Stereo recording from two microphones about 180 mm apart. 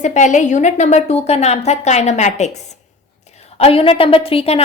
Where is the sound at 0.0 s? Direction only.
40° left (ahead or behind).